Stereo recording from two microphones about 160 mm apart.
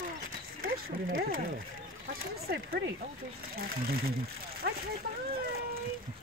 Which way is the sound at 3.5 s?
70° right (ahead or behind).